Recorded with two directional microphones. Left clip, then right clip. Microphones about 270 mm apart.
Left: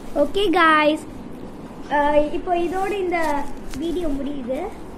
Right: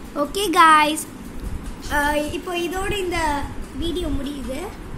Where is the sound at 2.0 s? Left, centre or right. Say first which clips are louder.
Left 3 dB; centre.